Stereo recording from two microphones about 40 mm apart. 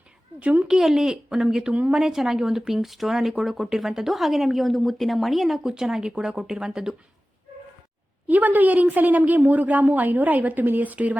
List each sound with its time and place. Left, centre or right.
0.3 s speech: right
0.6 s speech: centre
5.6 s speech: centre
8.3 s a woman's voice: right